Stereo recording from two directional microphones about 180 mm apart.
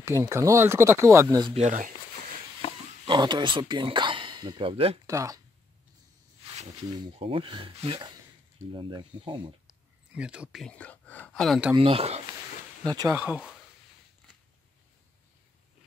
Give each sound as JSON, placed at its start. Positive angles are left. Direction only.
{"t": 0.0, "sound": "speech", "side_deg": -15}
{"t": 1.5, "sound": "speech", "side_deg": -40}
{"t": 2.6, "sound": "a sound", "side_deg": 35}
{"t": 3.1, "sound": "speech", "side_deg": -25}
{"t": 5.0, "sound": "speech", "side_deg": -20}
{"t": 6.4, "sound": "snake", "side_deg": -35}
{"t": 7.0, "sound": "speech", "side_deg": -30}
{"t": 9.7, "sound": "whispering", "side_deg": -5}
{"t": 11.7, "sound": "speech", "side_deg": -30}
{"t": 12.8, "sound": "speech", "side_deg": -20}